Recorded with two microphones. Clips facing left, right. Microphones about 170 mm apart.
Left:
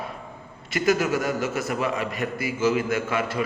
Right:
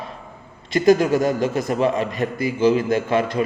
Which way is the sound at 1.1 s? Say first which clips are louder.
Right 6 dB; 20° right (ahead or behind).